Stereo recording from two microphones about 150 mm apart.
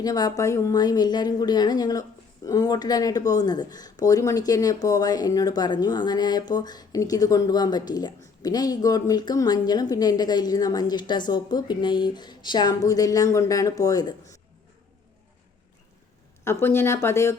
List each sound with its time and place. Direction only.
0.0 s a woman's voice: 25° left (ahead or behind)
16.4 s speech: 15° left (ahead or behind)